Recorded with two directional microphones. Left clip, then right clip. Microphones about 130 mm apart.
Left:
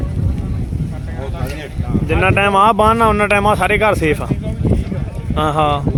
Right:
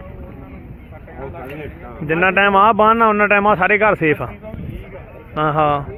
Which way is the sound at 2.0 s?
25° left (ahead or behind).